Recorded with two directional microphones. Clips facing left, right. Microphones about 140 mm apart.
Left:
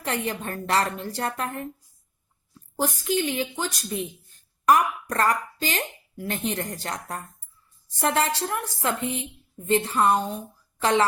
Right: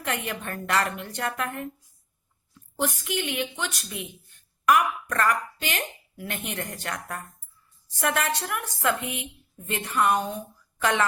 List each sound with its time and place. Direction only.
0.0 s a woman's voice: 30° left (ahead or behind)